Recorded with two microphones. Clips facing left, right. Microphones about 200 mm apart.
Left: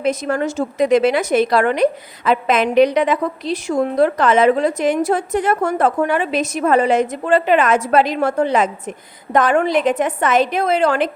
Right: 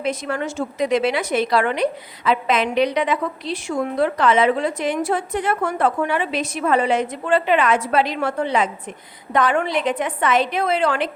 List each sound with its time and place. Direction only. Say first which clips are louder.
0.0 s a woman's voice: left 5 dB; 45° left (ahead or behind)